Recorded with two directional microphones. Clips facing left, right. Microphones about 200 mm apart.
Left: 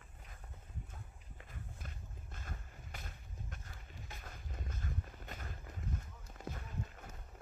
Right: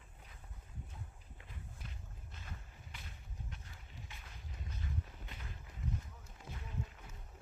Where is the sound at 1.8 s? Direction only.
45° left (ahead or behind).